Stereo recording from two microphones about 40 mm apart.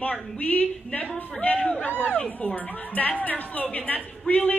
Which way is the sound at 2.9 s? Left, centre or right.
Left.